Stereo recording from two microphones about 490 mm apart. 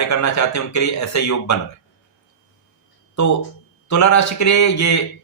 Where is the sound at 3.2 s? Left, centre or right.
Left.